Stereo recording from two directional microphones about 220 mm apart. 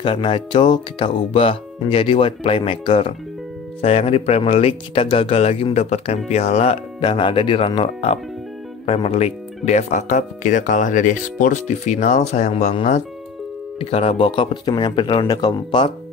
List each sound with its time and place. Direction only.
0.0 s speech: 25° left (ahead or behind)